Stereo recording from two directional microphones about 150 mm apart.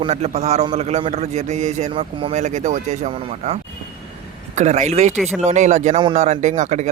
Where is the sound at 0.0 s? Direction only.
45° right (ahead or behind).